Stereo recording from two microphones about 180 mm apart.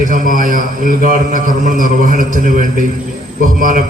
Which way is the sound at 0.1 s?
50° right (ahead or behind).